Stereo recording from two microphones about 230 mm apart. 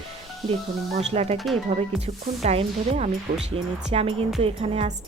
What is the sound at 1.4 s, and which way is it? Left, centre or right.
Speech, centre.